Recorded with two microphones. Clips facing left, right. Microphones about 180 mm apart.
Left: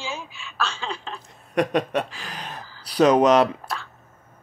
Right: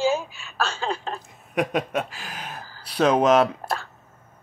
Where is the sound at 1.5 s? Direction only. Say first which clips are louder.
Left 2 dB; 5° right (ahead or behind).